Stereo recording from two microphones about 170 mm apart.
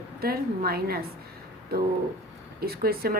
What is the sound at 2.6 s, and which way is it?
Speech, 65° right (ahead or behind).